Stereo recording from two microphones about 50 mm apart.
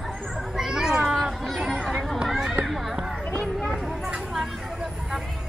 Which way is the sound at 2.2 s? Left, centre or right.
Centre.